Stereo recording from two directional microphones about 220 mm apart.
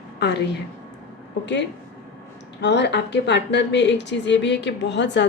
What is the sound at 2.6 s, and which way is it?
A woman's voice, 50° left (ahead or behind).